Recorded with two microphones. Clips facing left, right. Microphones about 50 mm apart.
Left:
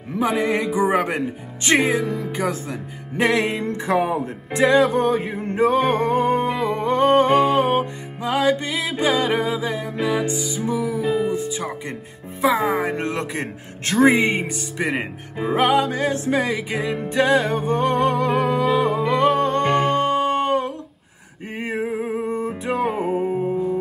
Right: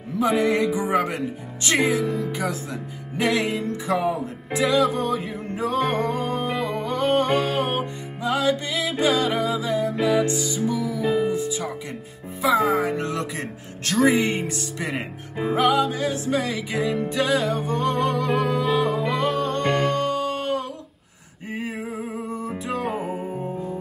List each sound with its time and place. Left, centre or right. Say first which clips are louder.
0.2 s music: even; left
2.0 s music: even; centre
3.2 s music: left 3 dB; left
7.3 s music: left 6 dB; left
9.9 s music: left 1 dB; centre
10.7 s music: left 3 dB; left
11.0 s music: right 1 dB; centre
12.4 s music: left 1 dB; left
14.2 s music: left 3 dB; centre
14.8 s music: left 6 dB; left
15.5 s music: left 2 dB; left
16.3 s music: left 3 dB; left
18.3 s music: left 3 dB; centre
19.1 s music: left 5 dB; left